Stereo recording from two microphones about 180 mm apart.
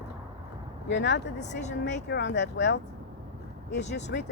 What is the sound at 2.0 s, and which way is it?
Speech, 70° left (ahead or behind).